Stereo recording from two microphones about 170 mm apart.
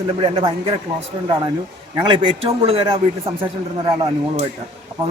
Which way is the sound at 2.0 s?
35° right (ahead or behind).